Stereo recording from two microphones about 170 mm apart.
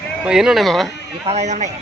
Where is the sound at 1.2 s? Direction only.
40° right (ahead or behind).